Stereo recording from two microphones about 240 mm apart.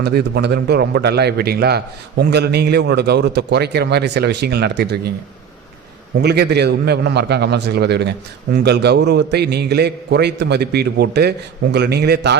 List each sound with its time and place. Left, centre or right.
0.0 s a man's voice: right
6.2 s a man's voice: right